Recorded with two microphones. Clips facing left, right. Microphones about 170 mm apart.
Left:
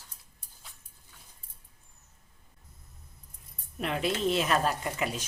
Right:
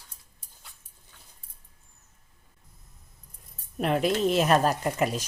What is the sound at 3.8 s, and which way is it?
Speech, 45° right (ahead or behind).